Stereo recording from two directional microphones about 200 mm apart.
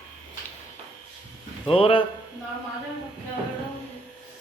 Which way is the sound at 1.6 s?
25° left (ahead or behind).